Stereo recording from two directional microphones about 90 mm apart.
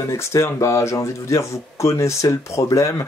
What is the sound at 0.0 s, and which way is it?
Speech, 35° left (ahead or behind).